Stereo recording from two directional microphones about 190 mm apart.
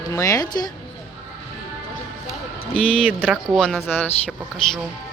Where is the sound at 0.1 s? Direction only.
15° left (ahead or behind).